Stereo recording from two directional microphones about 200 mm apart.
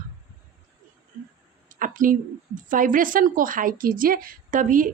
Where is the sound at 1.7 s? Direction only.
40° right (ahead or behind).